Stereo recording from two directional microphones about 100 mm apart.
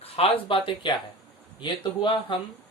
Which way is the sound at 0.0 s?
70° left (ahead or behind).